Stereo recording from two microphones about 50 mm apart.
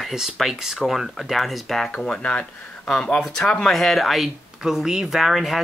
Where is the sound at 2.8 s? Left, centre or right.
Centre.